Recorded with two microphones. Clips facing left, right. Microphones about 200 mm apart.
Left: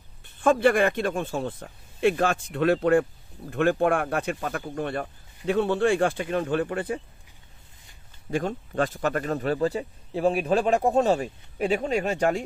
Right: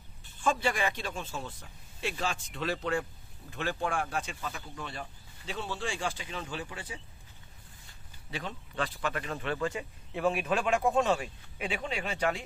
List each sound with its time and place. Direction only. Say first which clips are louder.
0.2 s speech: left 10 dB; 55° left (ahead or behind)
8.3 s speech: left 12 dB; 45° left (ahead or behind)